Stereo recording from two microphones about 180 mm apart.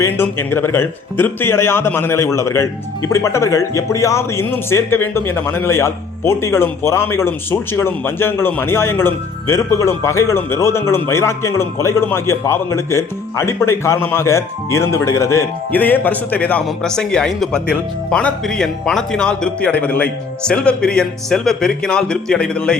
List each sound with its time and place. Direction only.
0.0 s speech: 15° left (ahead or behind)